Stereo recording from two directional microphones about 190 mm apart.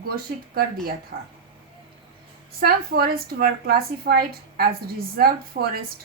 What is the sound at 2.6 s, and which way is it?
A woman's voice, 50° right (ahead or behind).